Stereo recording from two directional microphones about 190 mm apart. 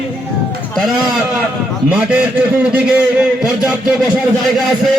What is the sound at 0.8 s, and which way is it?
A man's voice, centre (ahead or behind).